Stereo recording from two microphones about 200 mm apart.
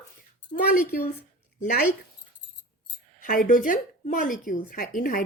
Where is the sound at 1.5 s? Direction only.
45° left (ahead or behind).